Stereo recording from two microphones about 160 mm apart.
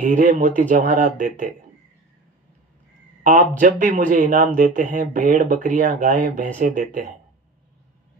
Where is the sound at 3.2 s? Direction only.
55° right (ahead or behind).